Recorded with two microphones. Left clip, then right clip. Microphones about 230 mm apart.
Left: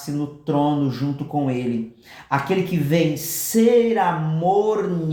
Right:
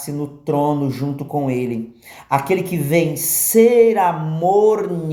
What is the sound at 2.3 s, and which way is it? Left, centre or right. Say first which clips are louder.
Speech: right 3 dB; right.